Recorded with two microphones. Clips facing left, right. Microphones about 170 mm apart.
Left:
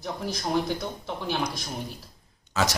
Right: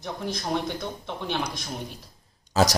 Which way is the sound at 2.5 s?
35° right (ahead or behind).